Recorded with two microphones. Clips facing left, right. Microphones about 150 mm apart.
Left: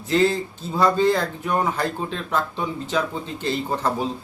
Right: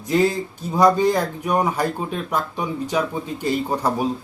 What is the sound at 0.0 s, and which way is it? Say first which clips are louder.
Speech: right 1 dB; 15° right (ahead or behind).